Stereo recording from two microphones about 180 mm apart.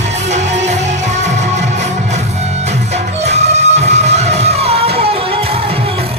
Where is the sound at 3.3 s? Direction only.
40° right (ahead or behind).